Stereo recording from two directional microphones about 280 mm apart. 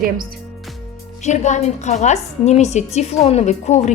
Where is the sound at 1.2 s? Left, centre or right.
Left.